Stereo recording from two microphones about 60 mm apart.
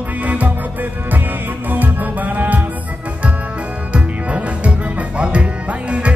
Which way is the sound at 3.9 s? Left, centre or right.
Right.